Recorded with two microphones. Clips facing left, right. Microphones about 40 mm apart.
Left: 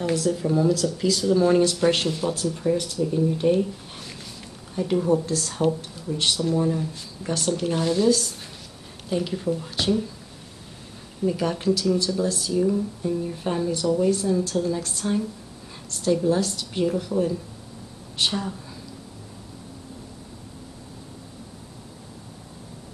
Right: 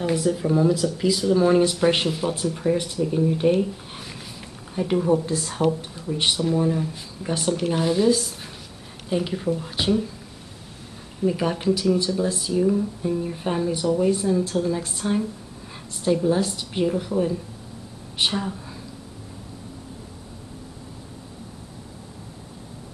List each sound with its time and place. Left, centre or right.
0.0 s speech: centre
11.2 s speech: centre